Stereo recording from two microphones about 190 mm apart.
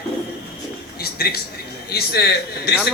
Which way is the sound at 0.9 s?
55° left (ahead or behind).